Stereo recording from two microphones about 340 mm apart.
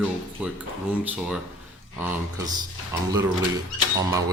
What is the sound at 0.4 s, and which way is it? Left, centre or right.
Speech, centre.